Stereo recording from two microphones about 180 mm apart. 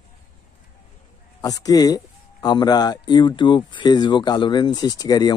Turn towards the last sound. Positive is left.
turn(degrees=20)  # may be behind; listen again after turning